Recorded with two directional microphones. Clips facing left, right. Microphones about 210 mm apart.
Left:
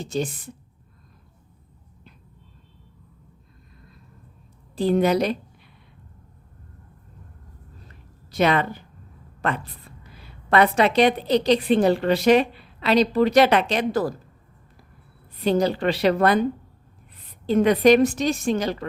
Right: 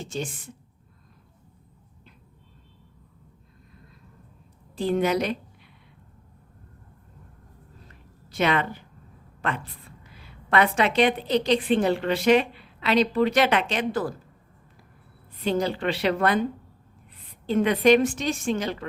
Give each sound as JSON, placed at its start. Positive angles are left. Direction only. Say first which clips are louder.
{"t": 0.0, "sound": "a woman's voice", "louder": "left 5 dB", "side_deg": 35}
{"t": 4.7, "sound": "a woman's voice", "louder": "left 4 dB", "side_deg": 35}
{"t": 8.3, "sound": "a woman's voice", "louder": "left 3 dB", "side_deg": 40}
{"t": 15.4, "sound": "a woman's voice", "louder": "left 4 dB", "side_deg": 40}
{"t": 17.4, "sound": "a woman's voice", "louder": "left 3 dB", "side_deg": 40}